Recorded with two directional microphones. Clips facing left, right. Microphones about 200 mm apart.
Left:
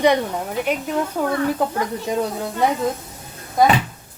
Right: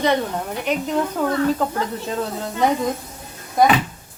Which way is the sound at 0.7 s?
10° left (ahead or behind).